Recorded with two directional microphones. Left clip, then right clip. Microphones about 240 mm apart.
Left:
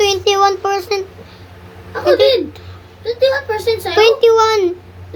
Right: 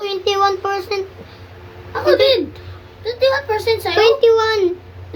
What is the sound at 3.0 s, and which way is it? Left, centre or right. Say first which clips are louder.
Speech: left 2 dB; right.